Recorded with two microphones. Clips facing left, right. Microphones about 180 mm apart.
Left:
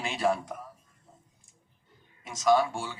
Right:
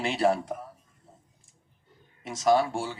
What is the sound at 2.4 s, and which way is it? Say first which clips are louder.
Speech: right 1 dB; 35° right (ahead or behind).